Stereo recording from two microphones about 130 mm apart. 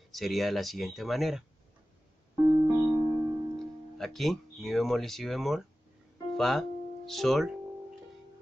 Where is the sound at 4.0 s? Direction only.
Centre (ahead or behind).